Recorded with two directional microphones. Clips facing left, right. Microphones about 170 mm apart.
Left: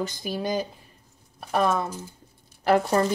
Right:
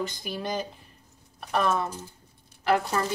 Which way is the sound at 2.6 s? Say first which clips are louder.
Left 4 dB; 40° left (ahead or behind).